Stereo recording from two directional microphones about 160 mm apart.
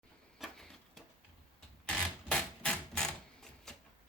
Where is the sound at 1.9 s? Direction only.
5° left (ahead or behind).